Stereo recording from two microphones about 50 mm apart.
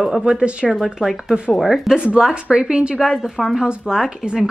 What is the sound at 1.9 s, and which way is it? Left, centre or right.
Speech, centre.